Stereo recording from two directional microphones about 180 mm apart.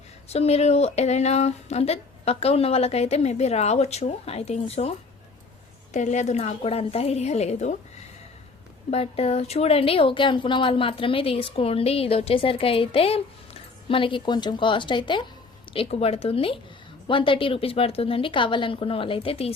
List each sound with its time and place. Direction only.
0.3 s a woman's voice: 35° left (ahead or behind)
8.9 s a woman's voice: 35° left (ahead or behind)